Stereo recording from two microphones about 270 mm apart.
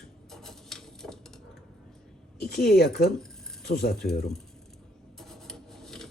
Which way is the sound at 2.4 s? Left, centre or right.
Left.